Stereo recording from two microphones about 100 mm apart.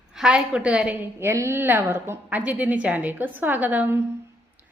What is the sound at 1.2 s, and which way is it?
A woman's voice, 25° right (ahead or behind).